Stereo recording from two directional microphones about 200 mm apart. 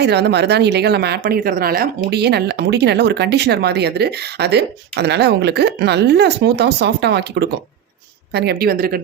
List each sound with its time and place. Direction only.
0.0 s speech: 55° right (ahead or behind)